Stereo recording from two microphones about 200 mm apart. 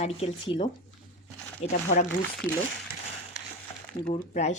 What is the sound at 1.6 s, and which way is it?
Speech, 30° left (ahead or behind).